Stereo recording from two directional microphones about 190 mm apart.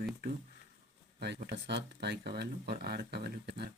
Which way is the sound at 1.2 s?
60° right (ahead or behind).